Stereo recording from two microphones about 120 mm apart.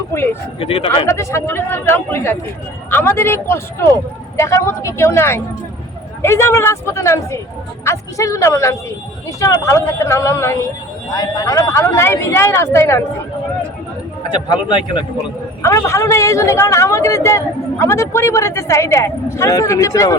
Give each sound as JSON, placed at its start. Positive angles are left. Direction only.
{"t": 0.1, "sound": "a man's voice", "side_deg": 20}
{"t": 0.6, "sound": "speech", "side_deg": 50}
{"t": 1.0, "sound": "a man's voice", "side_deg": 25}
{"t": 14.3, "sound": "a man's voice", "side_deg": 40}
{"t": 15.6, "sound": "a man's voice", "side_deg": 25}